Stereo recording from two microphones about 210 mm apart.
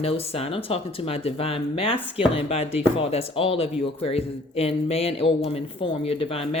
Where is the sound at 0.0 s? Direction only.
30° left (ahead or behind).